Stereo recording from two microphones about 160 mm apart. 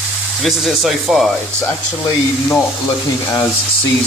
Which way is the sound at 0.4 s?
Centre (ahead or behind).